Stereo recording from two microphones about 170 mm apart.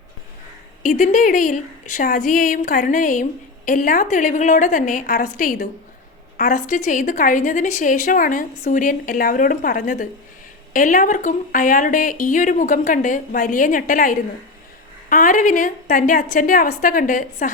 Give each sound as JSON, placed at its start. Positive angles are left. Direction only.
{"t": 0.8, "sound": "a woman's voice", "side_deg": 50}